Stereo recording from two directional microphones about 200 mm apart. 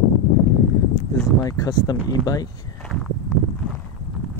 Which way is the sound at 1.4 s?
20° left (ahead or behind).